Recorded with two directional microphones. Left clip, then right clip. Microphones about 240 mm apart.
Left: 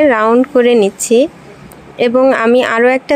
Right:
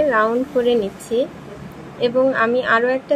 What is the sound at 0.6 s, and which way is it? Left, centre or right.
Speech, left.